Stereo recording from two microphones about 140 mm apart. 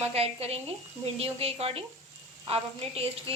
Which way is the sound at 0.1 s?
45° right (ahead or behind).